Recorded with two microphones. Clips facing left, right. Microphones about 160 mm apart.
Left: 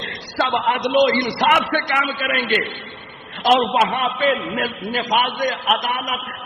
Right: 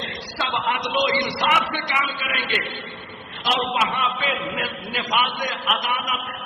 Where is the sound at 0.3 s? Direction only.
50° left (ahead or behind).